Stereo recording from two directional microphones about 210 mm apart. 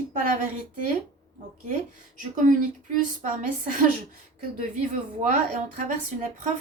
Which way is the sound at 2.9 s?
40° right (ahead or behind).